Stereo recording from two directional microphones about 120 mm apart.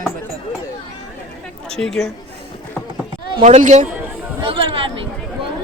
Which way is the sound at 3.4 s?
90° right.